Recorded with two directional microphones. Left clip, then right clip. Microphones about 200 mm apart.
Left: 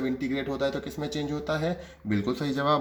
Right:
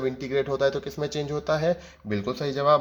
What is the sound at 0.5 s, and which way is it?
Speech, 40° right (ahead or behind).